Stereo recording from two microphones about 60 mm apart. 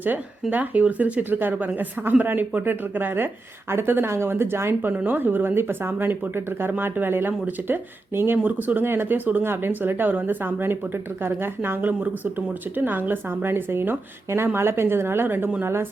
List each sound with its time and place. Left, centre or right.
0.5 s speech: right
4.9 s speech: right
11.8 s speech: right